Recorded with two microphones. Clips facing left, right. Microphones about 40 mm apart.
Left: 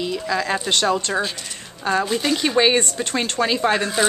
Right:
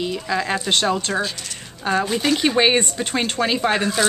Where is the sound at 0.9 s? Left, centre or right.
Centre.